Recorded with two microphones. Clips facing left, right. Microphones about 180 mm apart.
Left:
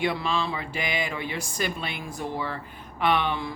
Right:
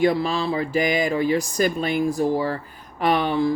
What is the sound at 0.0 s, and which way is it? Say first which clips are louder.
Speech: right 7 dB; 40° right (ahead or behind).